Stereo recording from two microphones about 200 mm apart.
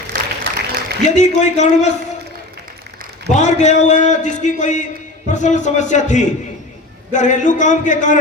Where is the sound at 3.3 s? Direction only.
35° left (ahead or behind).